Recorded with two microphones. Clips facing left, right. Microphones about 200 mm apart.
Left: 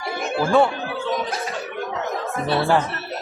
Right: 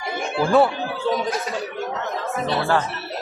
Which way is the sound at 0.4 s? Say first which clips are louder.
Right 1 dB; centre (ahead or behind).